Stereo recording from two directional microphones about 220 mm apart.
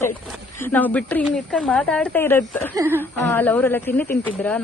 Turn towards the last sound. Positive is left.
turn(degrees=5)  # may be behind; listen again after turning